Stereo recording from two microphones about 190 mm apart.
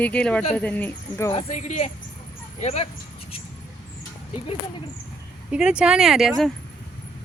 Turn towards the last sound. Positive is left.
turn(degrees=0)  # may be behind; listen again after turning